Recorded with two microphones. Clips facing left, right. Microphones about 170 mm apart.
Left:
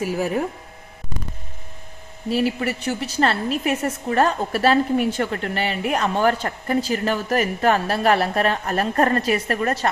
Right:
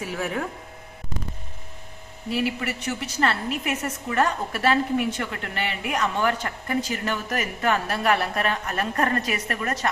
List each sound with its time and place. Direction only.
0.1 s speech: 25° left (ahead or behind)
2.3 s a woman's voice: 35° left (ahead or behind)